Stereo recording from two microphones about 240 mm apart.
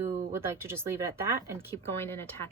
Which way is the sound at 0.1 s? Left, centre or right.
Right.